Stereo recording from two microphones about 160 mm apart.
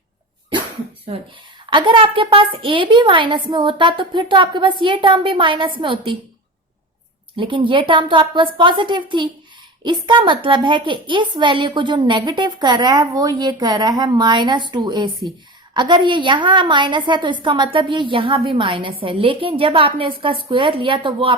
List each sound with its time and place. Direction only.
1.7 s a woman's voice: 30° right (ahead or behind)
7.3 s a woman's voice: 30° right (ahead or behind)